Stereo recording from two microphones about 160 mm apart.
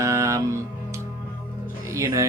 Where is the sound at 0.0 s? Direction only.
20° right (ahead or behind).